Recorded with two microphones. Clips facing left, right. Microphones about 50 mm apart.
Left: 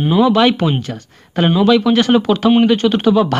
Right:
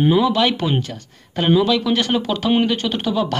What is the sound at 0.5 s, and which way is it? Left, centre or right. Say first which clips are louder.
Speech: left 4 dB; left.